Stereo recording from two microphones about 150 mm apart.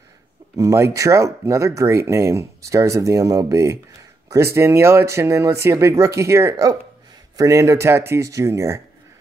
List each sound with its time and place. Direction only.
0.6 s speech: 20° right (ahead or behind)